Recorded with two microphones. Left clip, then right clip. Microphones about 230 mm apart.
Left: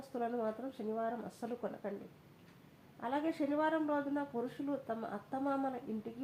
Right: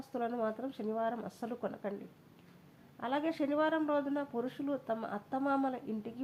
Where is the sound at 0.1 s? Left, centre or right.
Right.